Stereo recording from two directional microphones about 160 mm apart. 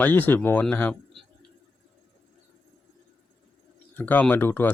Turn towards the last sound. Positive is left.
turn(degrees=10)  # may be behind; listen again after turning